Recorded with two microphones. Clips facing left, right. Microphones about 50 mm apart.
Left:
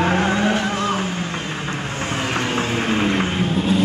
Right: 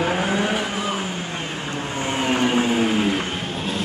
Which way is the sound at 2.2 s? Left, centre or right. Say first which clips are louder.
Right 4 dB; centre.